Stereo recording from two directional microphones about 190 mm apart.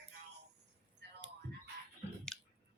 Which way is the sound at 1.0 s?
60° right (ahead or behind).